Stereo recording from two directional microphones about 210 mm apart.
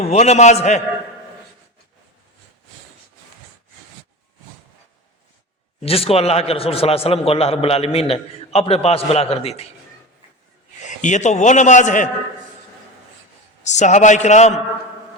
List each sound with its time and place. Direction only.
0.0 s a man's voice: 30° left (ahead or behind)
5.8 s a man's voice: 30° left (ahead or behind)
10.8 s a man's voice: 35° left (ahead or behind)
13.7 s a man's voice: 35° left (ahead or behind)